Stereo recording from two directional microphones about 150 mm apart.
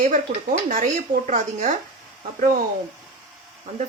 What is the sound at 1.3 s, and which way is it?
Speech, 60° right (ahead or behind).